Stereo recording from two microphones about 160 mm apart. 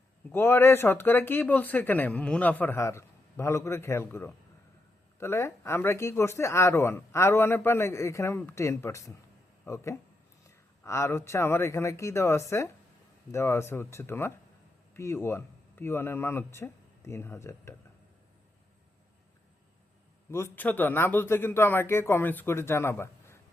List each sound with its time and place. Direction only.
0.3 s speech: 15° left (ahead or behind)
20.3 s speech: 15° left (ahead or behind)